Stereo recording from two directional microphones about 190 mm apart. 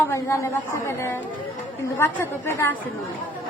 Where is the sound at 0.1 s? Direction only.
15° left (ahead or behind).